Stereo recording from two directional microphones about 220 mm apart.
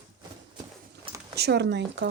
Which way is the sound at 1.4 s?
50° right (ahead or behind).